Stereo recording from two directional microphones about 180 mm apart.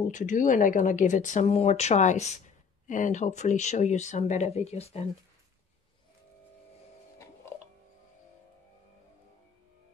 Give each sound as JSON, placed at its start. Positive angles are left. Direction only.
{"t": 0.0, "sound": "speech", "side_deg": 45}